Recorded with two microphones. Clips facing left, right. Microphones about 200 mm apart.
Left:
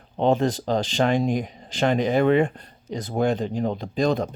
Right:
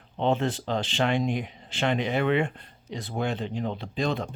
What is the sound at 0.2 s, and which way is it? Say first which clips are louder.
Speech: left 5 dB; 40° left (ahead or behind).